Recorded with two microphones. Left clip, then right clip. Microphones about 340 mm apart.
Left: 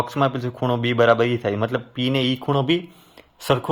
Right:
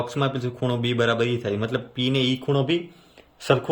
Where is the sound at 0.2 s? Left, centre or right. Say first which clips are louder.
Left 4 dB; centre.